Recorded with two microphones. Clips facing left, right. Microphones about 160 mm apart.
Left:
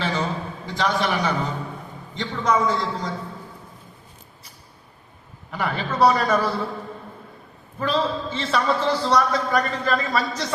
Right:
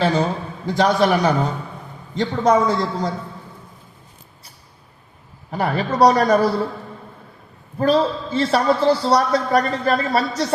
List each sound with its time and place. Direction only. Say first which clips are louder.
0.0 s a man's voice: right 6 dB; 40° right (ahead or behind)
5.5 s a man's voice: right 5 dB; 35° right (ahead or behind)
7.8 s a man's voice: right 6 dB; 35° right (ahead or behind)